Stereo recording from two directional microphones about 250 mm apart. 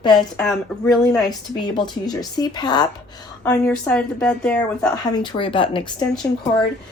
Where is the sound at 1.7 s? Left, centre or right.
Centre.